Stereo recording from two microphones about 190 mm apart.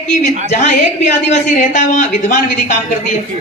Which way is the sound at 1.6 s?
40° left (ahead or behind).